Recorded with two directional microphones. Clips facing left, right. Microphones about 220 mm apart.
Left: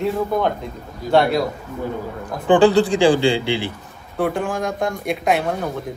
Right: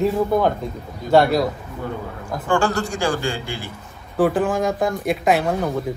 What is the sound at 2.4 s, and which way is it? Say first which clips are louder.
Speech: left 8 dB; 15° left (ahead or behind).